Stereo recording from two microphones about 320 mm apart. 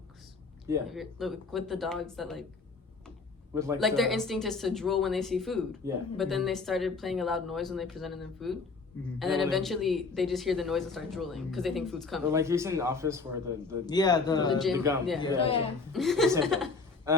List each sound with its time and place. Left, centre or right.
0.7 s a woman's voice: centre
3.5 s a woman's voice: centre
13.8 s speech: centre
14.6 s a woman's voice: centre
15.2 s speech: centre
15.9 s a woman's voice: centre